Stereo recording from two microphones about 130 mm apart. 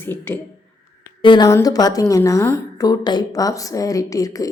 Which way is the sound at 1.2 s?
35° left (ahead or behind).